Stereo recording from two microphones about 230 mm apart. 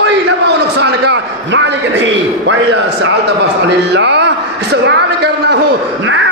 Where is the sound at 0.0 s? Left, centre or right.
Right.